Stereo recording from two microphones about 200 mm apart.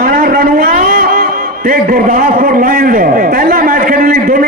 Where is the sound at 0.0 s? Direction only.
45° right (ahead or behind).